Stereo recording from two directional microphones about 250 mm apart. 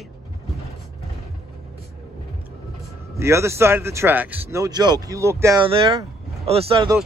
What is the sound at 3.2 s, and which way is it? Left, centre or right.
Speech, centre.